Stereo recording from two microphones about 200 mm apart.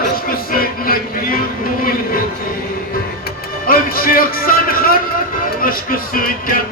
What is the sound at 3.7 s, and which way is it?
Music, 45° left (ahead or behind).